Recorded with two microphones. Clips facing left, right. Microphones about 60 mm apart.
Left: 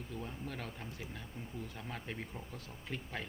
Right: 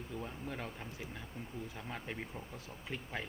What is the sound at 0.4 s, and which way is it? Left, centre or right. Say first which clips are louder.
Speech: right 1 dB; right.